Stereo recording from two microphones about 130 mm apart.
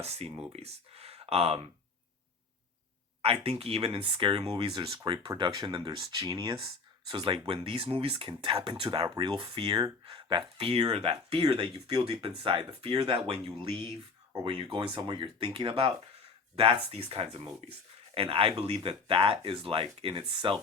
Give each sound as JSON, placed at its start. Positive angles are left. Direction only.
{"t": 0.0, "sound": "speech", "side_deg": -55}
{"t": 3.2, "sound": "speech", "side_deg": -50}
{"t": 8.3, "sound": "speech", "side_deg": -35}
{"t": 9.4, "sound": "speech", "side_deg": -45}